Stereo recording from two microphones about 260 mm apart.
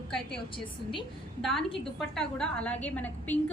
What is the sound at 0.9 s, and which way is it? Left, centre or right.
A woman's voice, centre.